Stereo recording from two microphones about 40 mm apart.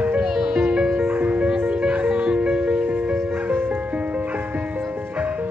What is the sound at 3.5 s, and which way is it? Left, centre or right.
Music, right.